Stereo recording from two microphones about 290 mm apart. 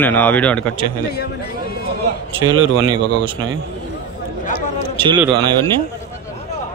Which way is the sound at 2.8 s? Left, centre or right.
Centre.